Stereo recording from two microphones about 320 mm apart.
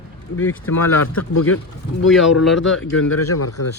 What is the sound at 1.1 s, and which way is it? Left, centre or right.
Speech, left.